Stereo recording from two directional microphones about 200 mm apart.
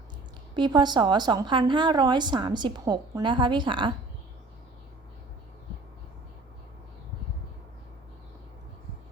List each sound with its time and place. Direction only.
0.5 s a woman's voice: 20° right (ahead or behind)